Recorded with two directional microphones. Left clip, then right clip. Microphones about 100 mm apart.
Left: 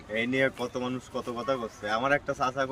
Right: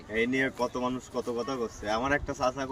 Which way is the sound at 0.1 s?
35° left (ahead or behind).